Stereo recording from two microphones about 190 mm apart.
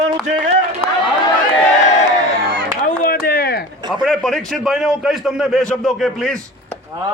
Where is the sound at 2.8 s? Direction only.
45° left (ahead or behind).